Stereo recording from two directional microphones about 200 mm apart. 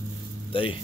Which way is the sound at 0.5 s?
25° left (ahead or behind).